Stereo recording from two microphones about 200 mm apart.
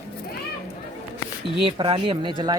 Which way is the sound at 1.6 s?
25° right (ahead or behind).